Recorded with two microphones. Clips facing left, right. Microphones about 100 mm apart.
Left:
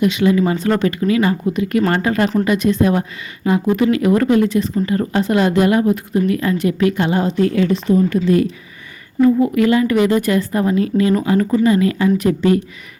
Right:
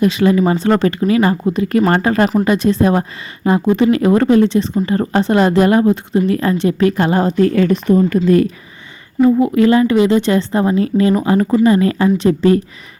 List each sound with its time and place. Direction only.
0.0 s speech: 35° right (ahead or behind)
9.4 s a woman's voice: 30° right (ahead or behind)